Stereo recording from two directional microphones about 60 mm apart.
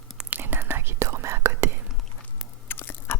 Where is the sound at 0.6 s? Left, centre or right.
Right.